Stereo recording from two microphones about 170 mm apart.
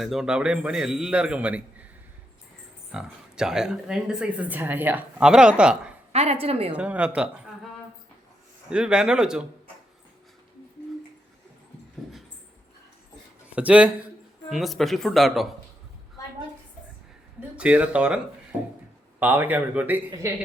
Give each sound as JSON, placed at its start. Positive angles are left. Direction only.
{"t": 0.0, "sound": "speech", "side_deg": 0}
{"t": 2.9, "sound": "speech", "side_deg": -5}
{"t": 6.1, "sound": "a woman's voice", "side_deg": -35}
{"t": 6.7, "sound": "speech", "side_deg": -5}
{"t": 8.7, "sound": "speech", "side_deg": -5}
{"t": 13.6, "sound": "speech", "side_deg": -10}
{"t": 17.6, "sound": "speech", "side_deg": -5}
{"t": 19.2, "sound": "speech", "side_deg": -10}